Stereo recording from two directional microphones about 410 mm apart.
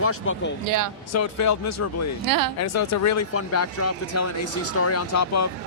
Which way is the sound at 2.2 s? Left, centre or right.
Right.